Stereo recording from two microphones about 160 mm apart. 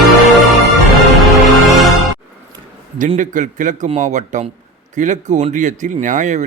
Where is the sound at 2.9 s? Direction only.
55° right (ahead or behind).